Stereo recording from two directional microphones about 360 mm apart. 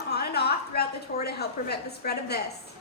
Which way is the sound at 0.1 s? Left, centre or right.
Left.